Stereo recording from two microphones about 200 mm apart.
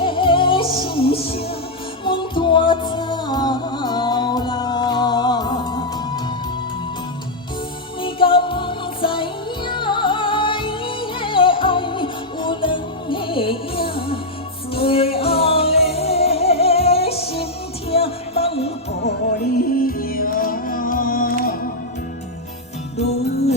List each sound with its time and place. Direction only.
0.0 s music: 25° left (ahead or behind)
8.0 s music: 25° left (ahead or behind)
19.5 s music: 45° left (ahead or behind)